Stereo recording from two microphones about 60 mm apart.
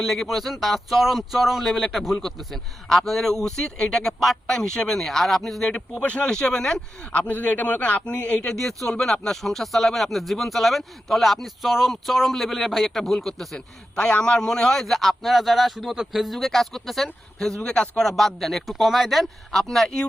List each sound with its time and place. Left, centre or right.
0.0 s speech: centre
6.0 s speech: left
7.0 s a man's voice: centre
8.4 s speech: centre